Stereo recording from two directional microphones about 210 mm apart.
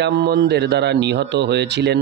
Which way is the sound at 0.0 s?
55° right (ahead or behind).